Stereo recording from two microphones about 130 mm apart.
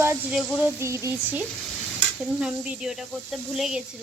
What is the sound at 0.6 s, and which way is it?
Speech, 20° right (ahead or behind).